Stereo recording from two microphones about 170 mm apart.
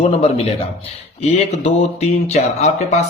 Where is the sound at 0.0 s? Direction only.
35° left (ahead or behind).